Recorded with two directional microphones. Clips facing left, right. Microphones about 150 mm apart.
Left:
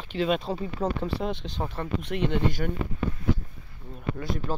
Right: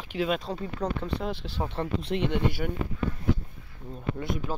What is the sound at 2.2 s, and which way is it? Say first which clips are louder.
Speech: left 2 dB; 10° right (ahead or behind).